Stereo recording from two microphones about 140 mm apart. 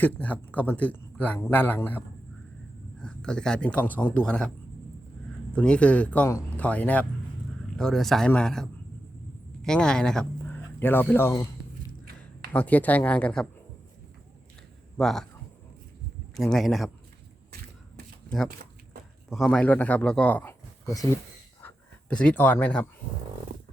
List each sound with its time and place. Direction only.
0.0 s speech: 10° left (ahead or behind)
3.0 s speech: 5° left (ahead or behind)
5.5 s speech: 10° left (ahead or behind)
12.5 s speech: 10° left (ahead or behind)
14.9 s speech: 5° left (ahead or behind)
16.3 s speech: centre (ahead or behind)
19.3 s speech: 5° left (ahead or behind); by 21.1 s 25° left (ahead or behind)
22.1 s speech: 5° left (ahead or behind)